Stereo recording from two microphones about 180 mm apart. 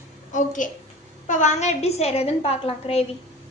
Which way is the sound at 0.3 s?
45° left (ahead or behind).